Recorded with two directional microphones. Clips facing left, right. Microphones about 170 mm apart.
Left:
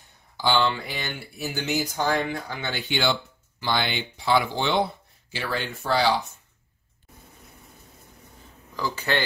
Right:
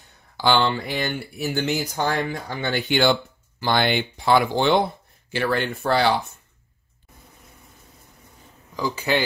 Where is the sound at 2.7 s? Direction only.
55° right (ahead or behind).